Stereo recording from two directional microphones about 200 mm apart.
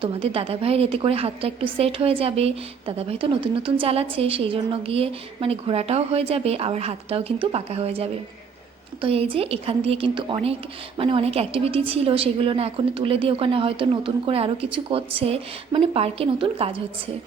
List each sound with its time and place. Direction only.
0.0 s a woman's voice: 30° right (ahead or behind)